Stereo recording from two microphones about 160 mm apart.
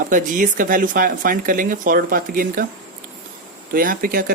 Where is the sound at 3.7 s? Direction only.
65° right (ahead or behind).